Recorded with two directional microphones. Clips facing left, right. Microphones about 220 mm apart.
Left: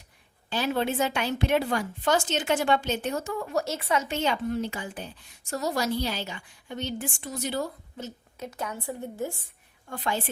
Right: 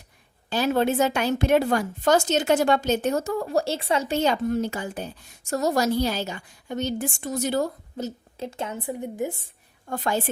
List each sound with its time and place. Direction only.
0.5 s a woman's voice: 45° right (ahead or behind); by 9.4 s 20° right (ahead or behind)
9.9 s a woman's voice: 45° right (ahead or behind)